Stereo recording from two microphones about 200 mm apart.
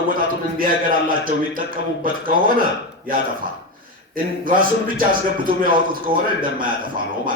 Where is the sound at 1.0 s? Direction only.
45° right (ahead or behind).